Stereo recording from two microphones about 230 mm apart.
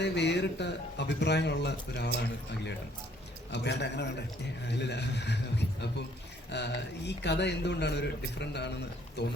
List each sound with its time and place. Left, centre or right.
0.0 s speech: left
3.5 s speech: left